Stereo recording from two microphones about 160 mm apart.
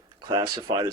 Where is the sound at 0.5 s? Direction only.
30° right (ahead or behind).